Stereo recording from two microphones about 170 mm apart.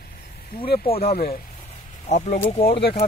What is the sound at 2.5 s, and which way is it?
Speech, 35° left (ahead or behind).